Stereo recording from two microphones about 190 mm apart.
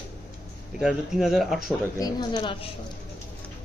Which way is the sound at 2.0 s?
20° left (ahead or behind).